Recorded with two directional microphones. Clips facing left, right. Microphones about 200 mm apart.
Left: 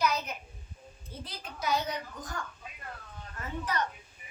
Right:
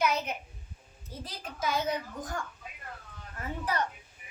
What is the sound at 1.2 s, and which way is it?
Speech, 45° right (ahead or behind).